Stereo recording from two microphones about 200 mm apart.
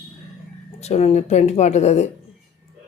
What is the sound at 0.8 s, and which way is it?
Speech, 30° left (ahead or behind).